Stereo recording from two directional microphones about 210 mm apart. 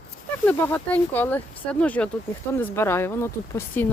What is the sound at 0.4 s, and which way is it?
Speech, 5° left (ahead or behind).